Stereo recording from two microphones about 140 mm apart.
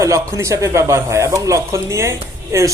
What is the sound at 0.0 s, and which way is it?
Speech, 20° right (ahead or behind).